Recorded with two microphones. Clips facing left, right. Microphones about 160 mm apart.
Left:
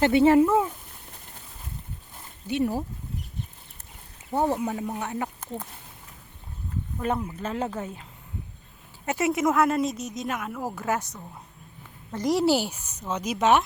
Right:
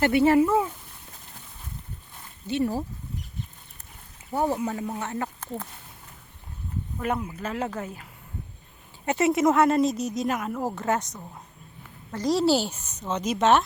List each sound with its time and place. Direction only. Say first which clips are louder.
0.0 s speech: left 2 dB; 20° left (ahead or behind)
0.4 s speech: left 1 dB; centre (ahead or behind)
2.5 s speech: even; 15° left (ahead or behind)
4.3 s speech: left 1 dB; 20° left (ahead or behind)
4.6 s speech: even; 5° left (ahead or behind)
7.3 s speech: left 1 dB; 5° right (ahead or behind)
9.0 s speech: right 3 dB; 5° left (ahead or behind)
12.1 s speech: even; 15° left (ahead or behind)